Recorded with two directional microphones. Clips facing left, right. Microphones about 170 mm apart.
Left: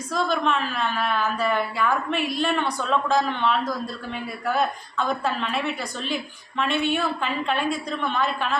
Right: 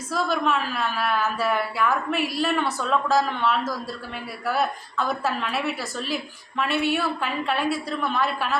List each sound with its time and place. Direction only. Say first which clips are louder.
0.1 s a woman's voice: even; 5° right (ahead or behind)